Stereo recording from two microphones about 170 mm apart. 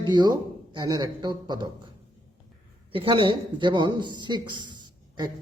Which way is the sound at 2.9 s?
30° right (ahead or behind).